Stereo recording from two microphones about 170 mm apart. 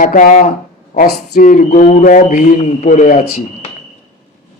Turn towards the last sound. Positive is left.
turn(degrees=45)  # may be behind; listen again after turning